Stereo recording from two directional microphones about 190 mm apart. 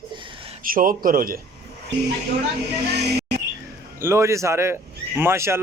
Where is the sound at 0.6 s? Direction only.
45° right (ahead or behind).